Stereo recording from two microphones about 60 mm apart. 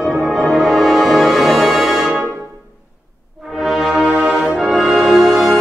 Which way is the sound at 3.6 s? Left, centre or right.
Centre.